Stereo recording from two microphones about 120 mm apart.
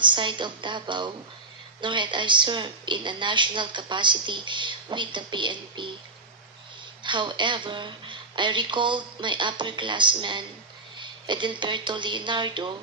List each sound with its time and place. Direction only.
0.0 s a woman's voice: 40° right (ahead or behind)
7.0 s a woman's voice: 40° right (ahead or behind)